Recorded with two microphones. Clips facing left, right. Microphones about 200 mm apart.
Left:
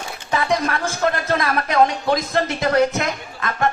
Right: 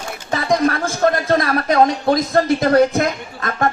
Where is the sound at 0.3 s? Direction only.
40° right (ahead or behind).